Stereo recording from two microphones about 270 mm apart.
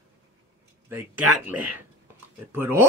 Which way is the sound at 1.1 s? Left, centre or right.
Right.